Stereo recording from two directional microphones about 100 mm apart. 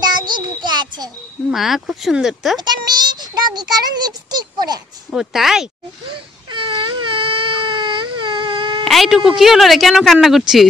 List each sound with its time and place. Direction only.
0.0 s a sound: 45° right (ahead or behind)
1.5 s a woman's voice: centre (ahead or behind)
2.6 s speech: 45° right (ahead or behind)
5.1 s a woman's voice: 5° right (ahead or behind)
6.5 s baby cry: 55° right (ahead or behind)
8.8 s a woman's voice: centre (ahead or behind)